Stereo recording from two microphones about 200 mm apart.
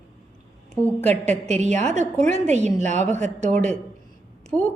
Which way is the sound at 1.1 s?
35° right (ahead or behind).